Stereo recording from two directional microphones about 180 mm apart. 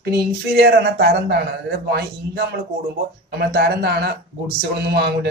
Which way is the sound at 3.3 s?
65° right (ahead or behind).